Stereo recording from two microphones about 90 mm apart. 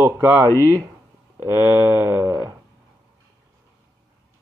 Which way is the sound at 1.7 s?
30° right (ahead or behind).